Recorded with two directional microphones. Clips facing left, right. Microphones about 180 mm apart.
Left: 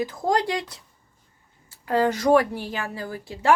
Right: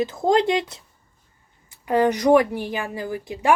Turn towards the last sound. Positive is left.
turn(degrees=-15)  # may be behind; listen again after turning